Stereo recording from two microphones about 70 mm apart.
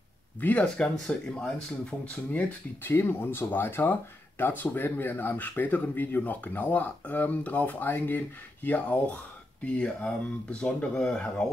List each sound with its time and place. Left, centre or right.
0.4 s speech: left
1.0 s speech: centre
2.8 s speech: left; by 11.1 s centre